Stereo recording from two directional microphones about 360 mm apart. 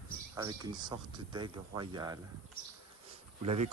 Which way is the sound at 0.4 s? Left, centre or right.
Centre.